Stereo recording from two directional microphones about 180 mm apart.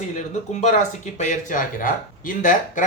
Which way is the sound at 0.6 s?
40° left (ahead or behind).